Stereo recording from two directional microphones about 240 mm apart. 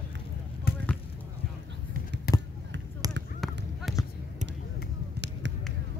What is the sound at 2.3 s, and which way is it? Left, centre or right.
Basketball bounce, left.